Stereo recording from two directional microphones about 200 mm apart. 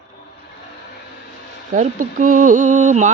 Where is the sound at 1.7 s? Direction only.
40° right (ahead or behind).